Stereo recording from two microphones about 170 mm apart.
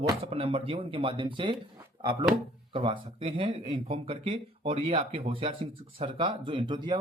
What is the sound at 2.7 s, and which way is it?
Speech, 30° right (ahead or behind).